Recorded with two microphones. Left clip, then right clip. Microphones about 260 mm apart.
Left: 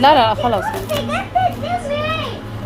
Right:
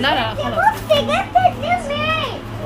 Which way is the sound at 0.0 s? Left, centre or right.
Centre.